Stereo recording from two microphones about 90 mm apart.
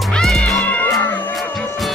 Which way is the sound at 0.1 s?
5° left (ahead or behind).